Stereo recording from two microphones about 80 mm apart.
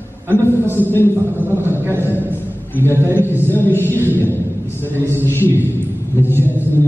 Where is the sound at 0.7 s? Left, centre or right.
Left.